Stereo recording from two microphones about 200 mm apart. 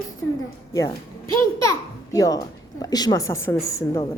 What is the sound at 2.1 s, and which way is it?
A man's voice, 15° left (ahead or behind).